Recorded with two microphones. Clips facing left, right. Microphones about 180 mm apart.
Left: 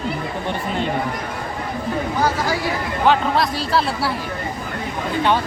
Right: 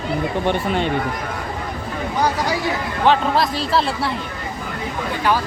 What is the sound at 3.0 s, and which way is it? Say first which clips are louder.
A man's voice: right 1 dB; centre (ahead or behind).